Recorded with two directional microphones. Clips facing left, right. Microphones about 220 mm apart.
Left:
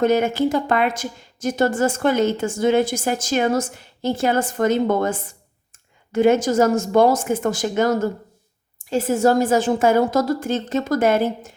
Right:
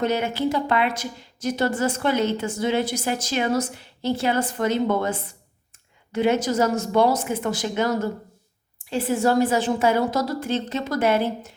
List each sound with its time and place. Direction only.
0.0 s a woman's voice: 45° left (ahead or behind)